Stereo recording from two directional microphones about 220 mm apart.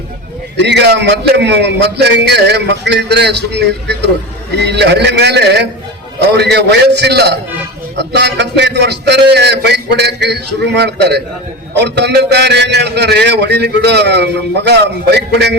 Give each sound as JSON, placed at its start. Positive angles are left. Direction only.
{"t": 0.6, "sound": "a man's voice", "side_deg": -50}